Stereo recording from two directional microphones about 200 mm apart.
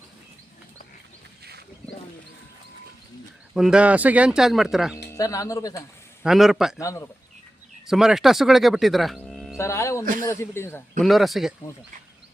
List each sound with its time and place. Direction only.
3.5 s speech: 5° right (ahead or behind)
5.1 s speech: 15° left (ahead or behind)
6.2 s speech: centre (ahead or behind)
6.7 s speech: 15° left (ahead or behind)
7.9 s speech: centre (ahead or behind)
9.6 s speech: 15° left (ahead or behind)
10.0 s speech: 45° right (ahead or behind)
10.2 s speech: 10° left (ahead or behind)
11.0 s speech: centre (ahead or behind)